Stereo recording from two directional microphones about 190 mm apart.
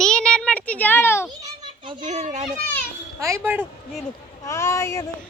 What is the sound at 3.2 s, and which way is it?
Speech, 15° right (ahead or behind).